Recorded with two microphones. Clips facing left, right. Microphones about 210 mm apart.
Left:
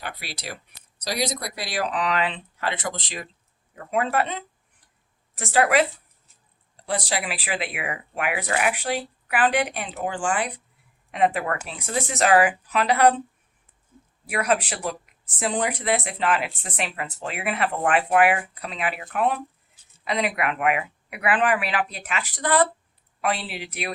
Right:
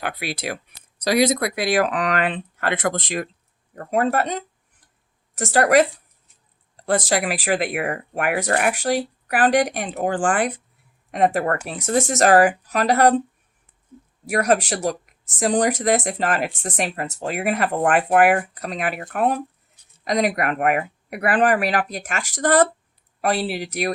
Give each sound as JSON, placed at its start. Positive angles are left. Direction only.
{"t": 0.0, "sound": "speech", "side_deg": -55}
{"t": 7.1, "sound": "speech", "side_deg": -45}
{"t": 14.3, "sound": "speech", "side_deg": -45}